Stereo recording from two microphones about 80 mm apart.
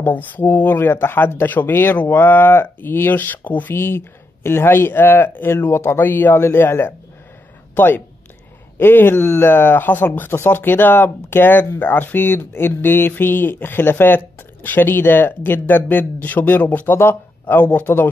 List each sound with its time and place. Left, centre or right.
0.0 s speech: left